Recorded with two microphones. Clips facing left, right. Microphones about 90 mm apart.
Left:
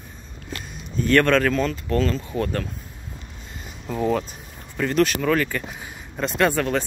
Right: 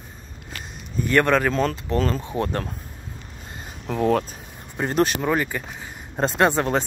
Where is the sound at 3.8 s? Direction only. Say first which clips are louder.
Right 2 dB; 55° right (ahead or behind).